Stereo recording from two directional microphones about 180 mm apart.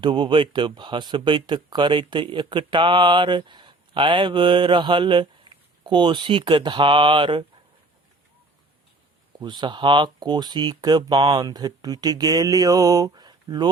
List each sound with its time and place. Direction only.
0.0 s speech: 25° right (ahead or behind)
9.4 s speech: 25° right (ahead or behind)